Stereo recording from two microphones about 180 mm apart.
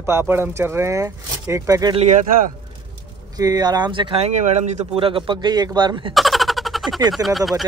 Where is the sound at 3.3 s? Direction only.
20° right (ahead or behind).